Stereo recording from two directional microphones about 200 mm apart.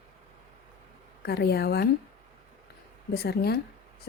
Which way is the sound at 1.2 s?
50° left (ahead or behind).